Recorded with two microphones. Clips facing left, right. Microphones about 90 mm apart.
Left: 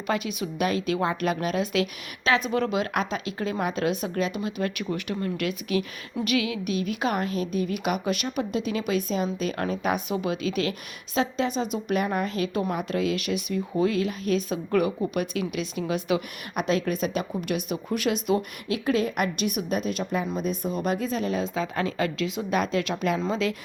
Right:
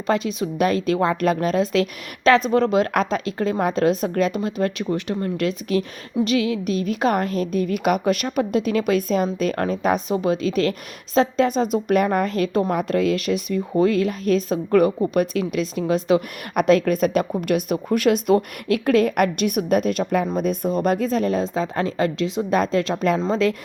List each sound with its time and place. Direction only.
0.1 s a woman's voice: 35° right (ahead or behind)